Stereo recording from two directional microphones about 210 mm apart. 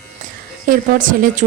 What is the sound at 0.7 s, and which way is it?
Speech, 40° right (ahead or behind).